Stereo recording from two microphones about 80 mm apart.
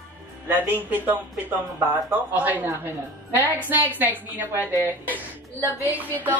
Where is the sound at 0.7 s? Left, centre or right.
Right.